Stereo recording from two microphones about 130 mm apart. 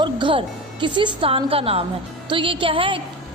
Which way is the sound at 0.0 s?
40° right (ahead or behind).